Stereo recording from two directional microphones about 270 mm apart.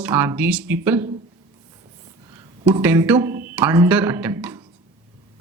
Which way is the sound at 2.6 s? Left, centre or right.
Centre.